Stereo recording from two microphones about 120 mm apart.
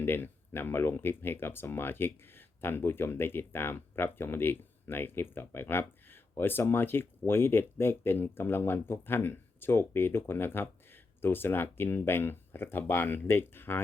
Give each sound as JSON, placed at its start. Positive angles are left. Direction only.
{"t": 0.0, "sound": "speech", "side_deg": 20}